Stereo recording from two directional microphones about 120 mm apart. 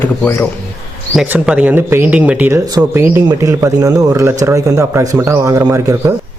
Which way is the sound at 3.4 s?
25° right (ahead or behind).